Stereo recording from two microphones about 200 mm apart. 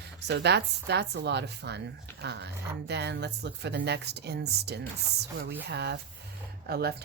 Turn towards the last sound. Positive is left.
turn(degrees=-50)  # may be behind; listen again after turning